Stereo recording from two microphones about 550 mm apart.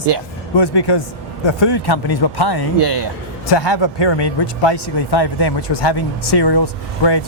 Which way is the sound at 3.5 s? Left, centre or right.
Left.